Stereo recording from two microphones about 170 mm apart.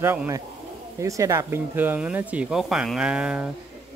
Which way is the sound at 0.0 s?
15° right (ahead or behind).